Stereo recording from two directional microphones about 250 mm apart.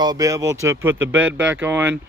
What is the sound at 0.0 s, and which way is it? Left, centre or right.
Speech, centre.